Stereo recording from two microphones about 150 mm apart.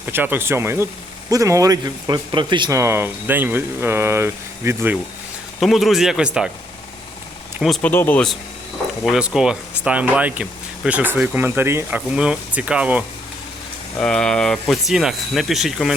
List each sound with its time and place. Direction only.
0.0 s speech: 15° right (ahead or behind); by 2.7 s 30° right (ahead or behind)
2.7 s speech: 20° right (ahead or behind)
5.5 s speech: centre (ahead or behind)
7.8 s speech: 10° left (ahead or behind)
9.0 s speech: 5° right (ahead or behind)
14.0 s speech: 5° left (ahead or behind)